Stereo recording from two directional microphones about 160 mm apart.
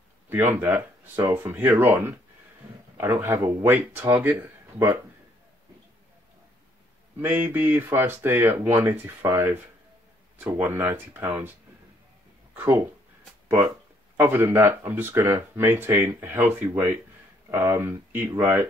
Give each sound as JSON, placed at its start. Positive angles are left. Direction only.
{"t": 0.3, "sound": "speech", "side_deg": -15}
{"t": 7.2, "sound": "speech", "side_deg": -10}
{"t": 12.5, "sound": "speech", "side_deg": -15}